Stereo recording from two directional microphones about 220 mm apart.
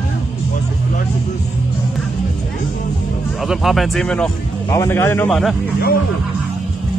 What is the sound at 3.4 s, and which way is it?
A man's voice, centre (ahead or behind).